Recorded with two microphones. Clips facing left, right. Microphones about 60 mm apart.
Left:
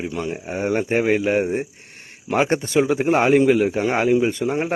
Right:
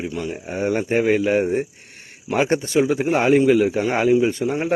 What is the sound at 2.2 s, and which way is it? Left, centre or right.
Speech, left.